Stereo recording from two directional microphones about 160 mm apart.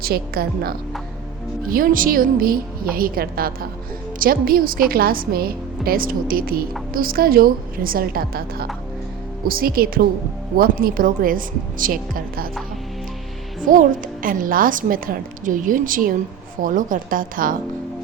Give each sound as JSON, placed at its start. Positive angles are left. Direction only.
{"t": 0.0, "sound": "a woman's voice", "side_deg": -70}
{"t": 13.7, "sound": "a woman's voice", "side_deg": -55}